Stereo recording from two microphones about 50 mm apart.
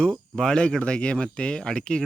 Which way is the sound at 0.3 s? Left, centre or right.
Centre.